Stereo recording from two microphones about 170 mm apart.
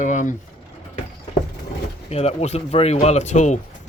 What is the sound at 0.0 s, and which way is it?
Speech, 45° left (ahead or behind).